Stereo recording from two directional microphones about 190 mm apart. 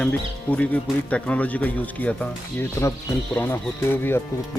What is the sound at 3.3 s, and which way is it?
Speech, 10° left (ahead or behind).